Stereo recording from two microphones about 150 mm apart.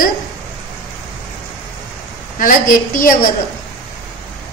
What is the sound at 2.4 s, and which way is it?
Speech, 65° left (ahead or behind).